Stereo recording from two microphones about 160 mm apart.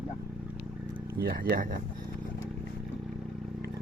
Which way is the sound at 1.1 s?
65° right (ahead or behind).